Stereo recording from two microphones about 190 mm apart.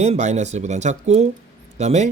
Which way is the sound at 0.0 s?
35° right (ahead or behind).